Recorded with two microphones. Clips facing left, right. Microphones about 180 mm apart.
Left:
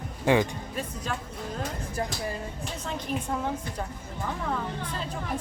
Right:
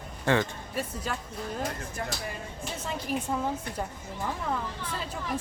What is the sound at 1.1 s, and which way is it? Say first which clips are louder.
Speech: left 2 dB; 5° right (ahead or behind).